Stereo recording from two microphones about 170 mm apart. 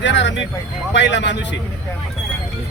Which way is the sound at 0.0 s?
90° left.